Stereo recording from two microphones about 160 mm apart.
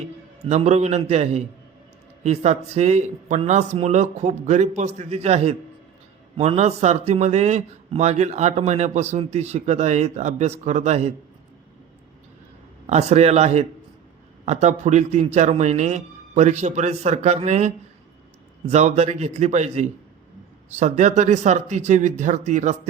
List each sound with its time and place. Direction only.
0.4 s a man's voice: 45° right (ahead or behind)
12.9 s a man's voice: 40° right (ahead or behind)